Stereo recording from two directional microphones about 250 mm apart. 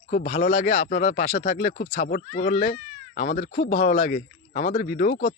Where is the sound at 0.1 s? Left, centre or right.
Left.